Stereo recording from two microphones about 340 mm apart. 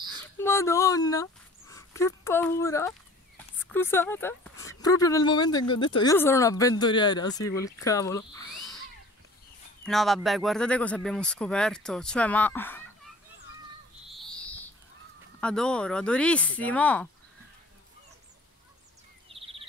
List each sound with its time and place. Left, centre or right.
0.1 s a sound: centre
3.5 s speech: centre
9.8 s speech: centre
14.0 s a sound: centre
15.4 s speech: centre
19.2 s bird vocalization: centre